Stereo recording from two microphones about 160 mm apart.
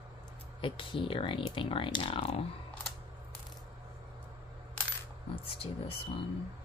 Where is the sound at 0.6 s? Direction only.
35° left (ahead or behind).